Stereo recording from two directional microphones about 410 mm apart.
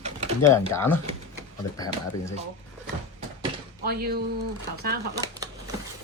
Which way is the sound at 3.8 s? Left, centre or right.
Right.